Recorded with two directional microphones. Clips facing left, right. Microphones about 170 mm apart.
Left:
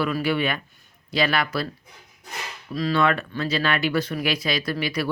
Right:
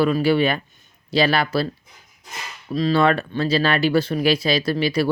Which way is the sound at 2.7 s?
25° right (ahead or behind).